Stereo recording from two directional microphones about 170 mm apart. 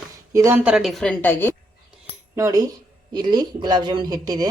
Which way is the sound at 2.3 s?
20° right (ahead or behind).